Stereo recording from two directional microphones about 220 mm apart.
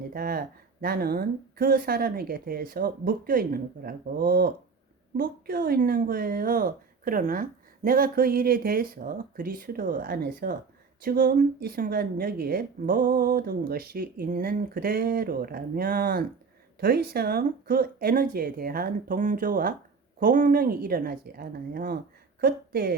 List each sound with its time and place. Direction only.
0.1 s a woman's voice: 40° right (ahead or behind)